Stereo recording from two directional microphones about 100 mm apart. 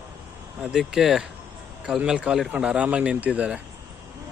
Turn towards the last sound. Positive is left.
turn(degrees=-15)  # may be behind; listen again after turning